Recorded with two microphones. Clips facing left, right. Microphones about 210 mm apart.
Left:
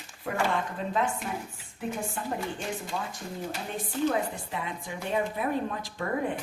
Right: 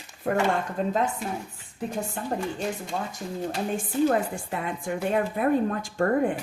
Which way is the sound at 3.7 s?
50° right (ahead or behind).